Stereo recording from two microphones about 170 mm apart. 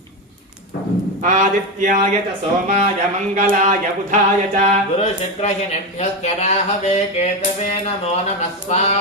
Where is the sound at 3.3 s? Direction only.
45° right (ahead or behind).